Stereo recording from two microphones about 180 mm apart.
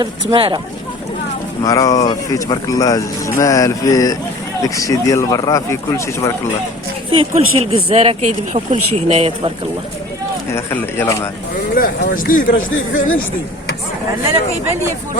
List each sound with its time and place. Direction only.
0.0 s speech: 25° right (ahead or behind)
1.6 s speech: 20° left (ahead or behind)
7.2 s speech: 35° right (ahead or behind)
10.5 s speech: 10° left (ahead or behind)
11.7 s speech: 50° left (ahead or behind)